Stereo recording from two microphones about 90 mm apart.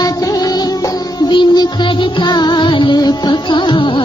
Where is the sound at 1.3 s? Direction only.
65° left (ahead or behind).